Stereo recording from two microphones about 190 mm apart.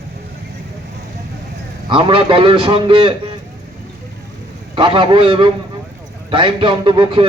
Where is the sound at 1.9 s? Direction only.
25° right (ahead or behind).